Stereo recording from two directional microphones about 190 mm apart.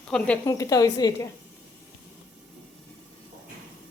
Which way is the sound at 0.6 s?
20° left (ahead or behind).